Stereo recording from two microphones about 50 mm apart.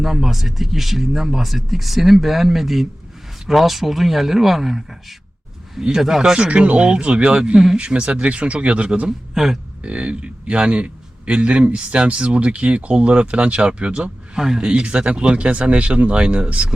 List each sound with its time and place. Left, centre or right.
0.0 s speech: centre
6.4 s a man's voice: right
9.3 s a sound: centre
9.8 s a man's voice: right
14.7 s a man's voice: right